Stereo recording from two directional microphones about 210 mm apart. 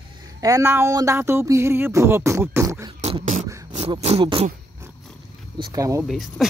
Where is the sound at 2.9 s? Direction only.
30° right (ahead or behind).